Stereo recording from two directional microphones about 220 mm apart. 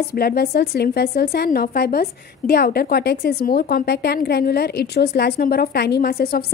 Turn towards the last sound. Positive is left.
turn(degrees=45)  # may be behind; listen again after turning